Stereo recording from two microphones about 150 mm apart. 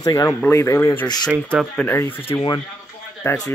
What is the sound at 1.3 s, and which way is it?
Speech, 10° right (ahead or behind).